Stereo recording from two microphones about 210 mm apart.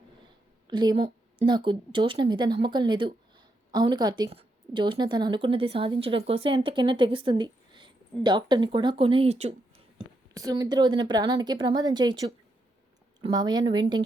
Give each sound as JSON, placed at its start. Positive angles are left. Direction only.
{"t": 0.7, "sound": "speech", "side_deg": -20}
{"t": 10.3, "sound": "speech", "side_deg": -15}